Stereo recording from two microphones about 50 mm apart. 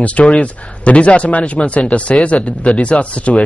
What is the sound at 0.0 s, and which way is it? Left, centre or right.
Speech, left.